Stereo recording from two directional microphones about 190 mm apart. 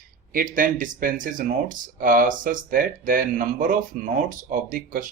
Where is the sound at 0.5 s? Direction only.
45° right (ahead or behind).